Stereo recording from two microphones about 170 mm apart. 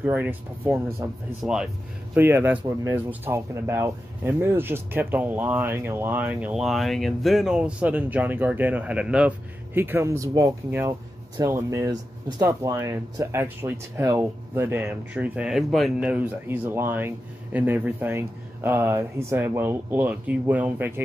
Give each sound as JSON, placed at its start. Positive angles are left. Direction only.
{"t": 0.0, "sound": "speech", "side_deg": -10}
{"t": 1.4, "sound": "speech", "side_deg": -5}